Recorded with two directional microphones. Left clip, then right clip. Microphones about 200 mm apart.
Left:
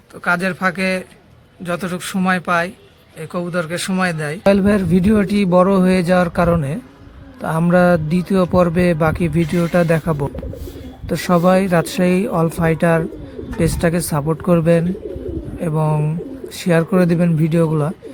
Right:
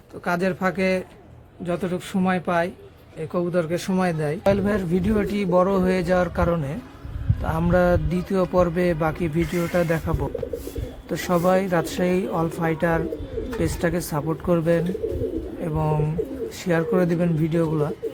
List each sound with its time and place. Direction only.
0.3 s speech: 5° right (ahead or behind)
4.4 s speech: 25° left (ahead or behind)